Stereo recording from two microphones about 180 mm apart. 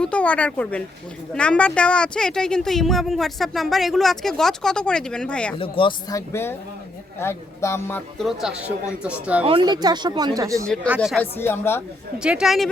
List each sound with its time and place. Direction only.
0.0 s speech: 5° left (ahead or behind)
5.5 s speech: 30° left (ahead or behind); by 8.0 s 15° left (ahead or behind)
8.2 s speech: centre (ahead or behind)
9.4 s speech: 30° right (ahead or behind)
10.8 s speech: 5° right (ahead or behind)
11.2 s speech: 10° left (ahead or behind)
12.2 s speech: 5° right (ahead or behind)